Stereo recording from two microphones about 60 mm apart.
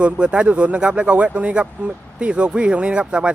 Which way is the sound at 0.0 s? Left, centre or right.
Centre.